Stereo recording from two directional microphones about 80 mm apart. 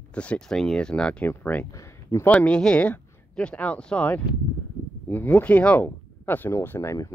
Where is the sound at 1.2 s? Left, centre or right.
Left.